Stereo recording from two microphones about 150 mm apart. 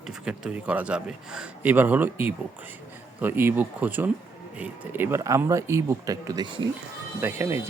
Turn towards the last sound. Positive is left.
turn(degrees=-15)  # may be behind; listen again after turning